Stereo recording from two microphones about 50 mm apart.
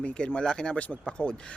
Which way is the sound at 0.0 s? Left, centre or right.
Left.